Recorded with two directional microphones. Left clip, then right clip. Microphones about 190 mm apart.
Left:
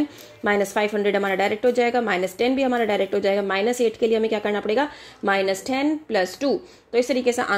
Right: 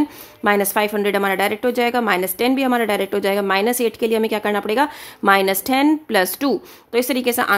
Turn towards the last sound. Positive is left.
turn(degrees=-15)  # may be behind; listen again after turning